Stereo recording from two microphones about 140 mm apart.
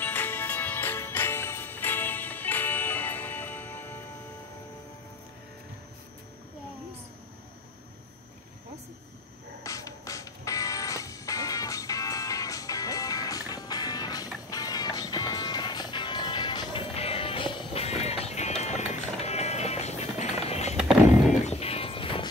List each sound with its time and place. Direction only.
0.0 s music: 15° left (ahead or behind)
9.6 s music: 25° left (ahead or behind); by 20.7 s 50° left (ahead or behind)
20.7 s a sound: centre (ahead or behind)
21.5 s music: 45° left (ahead or behind)